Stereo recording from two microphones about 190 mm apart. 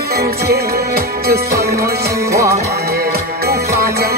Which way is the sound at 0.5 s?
55° right (ahead or behind).